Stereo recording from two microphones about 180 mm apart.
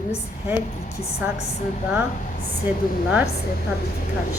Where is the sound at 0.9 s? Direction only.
35° left (ahead or behind).